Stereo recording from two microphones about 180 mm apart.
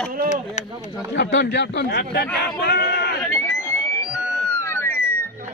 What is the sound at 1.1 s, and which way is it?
A man's voice, 75° left (ahead or behind).